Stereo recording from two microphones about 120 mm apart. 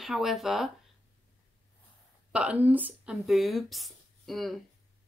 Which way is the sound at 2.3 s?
10° right (ahead or behind).